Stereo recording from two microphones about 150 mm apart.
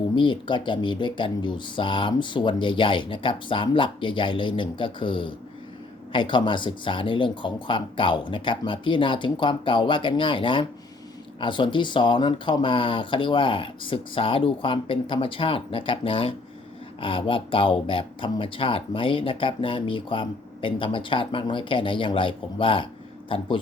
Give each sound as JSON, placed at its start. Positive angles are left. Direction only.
{"t": 0.2, "sound": "speech", "side_deg": 30}